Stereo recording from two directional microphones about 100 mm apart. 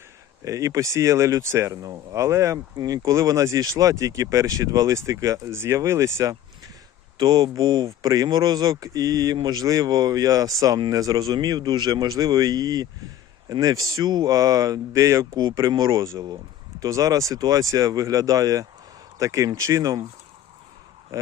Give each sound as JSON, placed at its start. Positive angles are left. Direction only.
{"t": 0.4, "sound": "speech", "side_deg": -35}
{"t": 7.2, "sound": "speech", "side_deg": -45}
{"t": 7.6, "sound": "speech", "side_deg": -50}
{"t": 7.9, "sound": "speech", "side_deg": -35}
{"t": 21.1, "sound": "speech", "side_deg": -35}